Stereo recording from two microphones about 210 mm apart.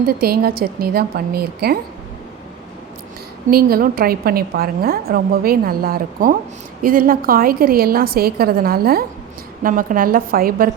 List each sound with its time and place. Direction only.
0.0 s a woman's voice: 45° right (ahead or behind)
3.5 s a woman's voice: 45° right (ahead or behind)